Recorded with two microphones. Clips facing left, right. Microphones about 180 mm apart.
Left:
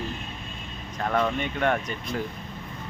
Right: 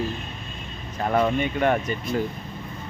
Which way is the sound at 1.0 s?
15° right (ahead or behind).